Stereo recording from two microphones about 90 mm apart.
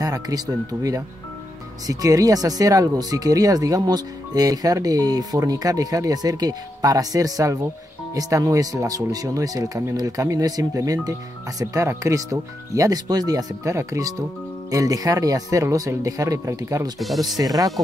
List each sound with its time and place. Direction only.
0.0 s speech: 45° right (ahead or behind)